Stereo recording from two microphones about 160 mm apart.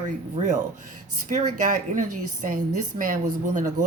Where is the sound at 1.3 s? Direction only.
55° right (ahead or behind).